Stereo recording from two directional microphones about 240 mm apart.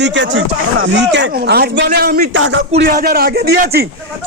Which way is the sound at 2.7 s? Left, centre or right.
Right.